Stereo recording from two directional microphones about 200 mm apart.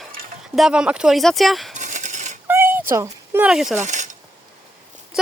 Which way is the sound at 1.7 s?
35° right (ahead or behind).